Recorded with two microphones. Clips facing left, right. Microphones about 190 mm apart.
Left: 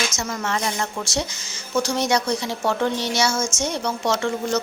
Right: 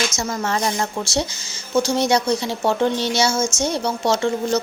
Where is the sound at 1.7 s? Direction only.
25° right (ahead or behind).